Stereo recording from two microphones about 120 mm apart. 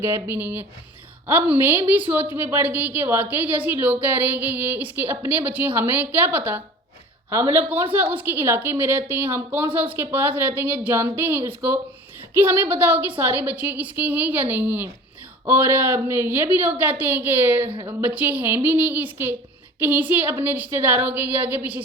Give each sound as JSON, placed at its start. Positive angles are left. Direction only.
{"t": 0.0, "sound": "a woman's voice", "side_deg": -20}
{"t": 17.7, "sound": "speech", "side_deg": -40}
{"t": 18.0, "sound": "a woman's voice", "side_deg": -15}